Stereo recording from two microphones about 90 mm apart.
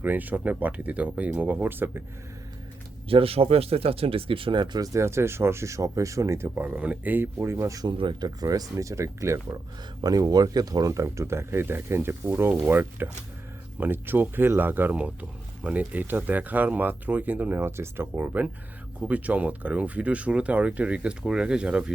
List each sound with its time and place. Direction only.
0.0 s speech: 20° right (ahead or behind)
3.1 s speech: 90° right; by 4.8 s 60° right (ahead or behind)
4.8 s speech: 35° right (ahead or behind)
6.7 s speech: 15° right (ahead or behind); by 7.8 s 30° right (ahead or behind)
7.9 s speech: 55° right (ahead or behind); by 9.6 s 35° right (ahead or behind)
10.0 s speech: 45° right (ahead or behind); by 21.9 s 10° right (ahead or behind)